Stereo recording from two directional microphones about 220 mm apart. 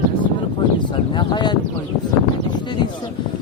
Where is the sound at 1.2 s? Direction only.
20° left (ahead or behind).